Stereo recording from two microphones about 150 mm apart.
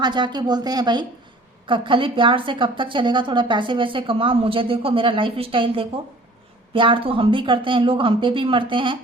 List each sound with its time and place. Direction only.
0.0 s a woman's voice: 30° right (ahead or behind)